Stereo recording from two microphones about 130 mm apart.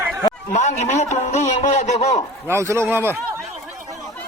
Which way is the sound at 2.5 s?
20° right (ahead or behind).